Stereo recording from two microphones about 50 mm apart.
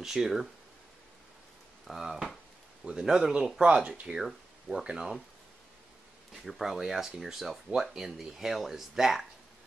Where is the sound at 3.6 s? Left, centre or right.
Centre.